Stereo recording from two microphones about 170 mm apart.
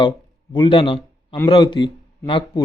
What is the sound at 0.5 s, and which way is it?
A man's voice, 30° left (ahead or behind).